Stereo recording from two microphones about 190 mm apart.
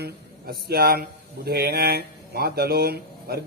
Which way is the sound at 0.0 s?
55° right (ahead or behind).